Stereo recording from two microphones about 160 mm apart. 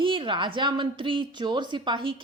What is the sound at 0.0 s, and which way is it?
A woman's voice, 30° right (ahead or behind).